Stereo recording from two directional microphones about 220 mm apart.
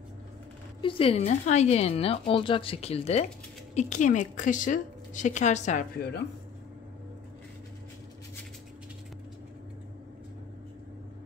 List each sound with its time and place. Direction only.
0.7 s a woman's voice: 25° left (ahead or behind)